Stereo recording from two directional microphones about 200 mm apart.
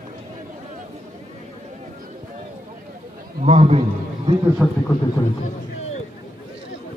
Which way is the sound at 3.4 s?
30° right (ahead or behind).